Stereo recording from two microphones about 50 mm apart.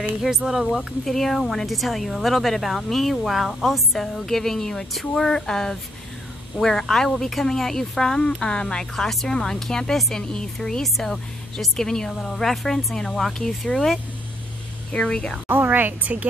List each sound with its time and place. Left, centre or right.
0.2 s speech: centre
15.0 s speech: centre
15.4 s a woman's voice: right